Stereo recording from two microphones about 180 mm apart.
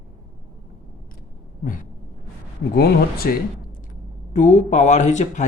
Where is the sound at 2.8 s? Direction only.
60° left (ahead or behind).